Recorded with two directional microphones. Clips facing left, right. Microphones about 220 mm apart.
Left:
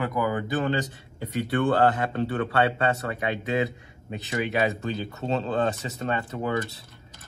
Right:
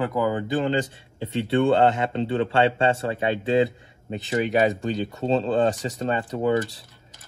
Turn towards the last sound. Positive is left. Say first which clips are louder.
# right 6 dB
turn(degrees=-30)  # may be behind; listen again after turning